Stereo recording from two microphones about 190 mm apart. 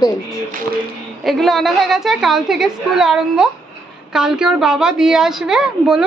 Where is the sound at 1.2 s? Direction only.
Centre (ahead or behind).